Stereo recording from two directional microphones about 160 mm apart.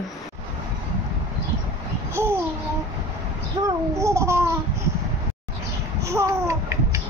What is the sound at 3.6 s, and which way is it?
Speech, 20° right (ahead or behind).